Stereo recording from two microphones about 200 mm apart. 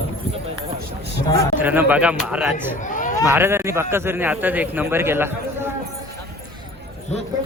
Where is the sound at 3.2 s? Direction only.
10° right (ahead or behind).